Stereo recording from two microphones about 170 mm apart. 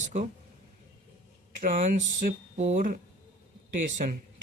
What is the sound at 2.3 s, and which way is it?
Speech, 45° right (ahead or behind).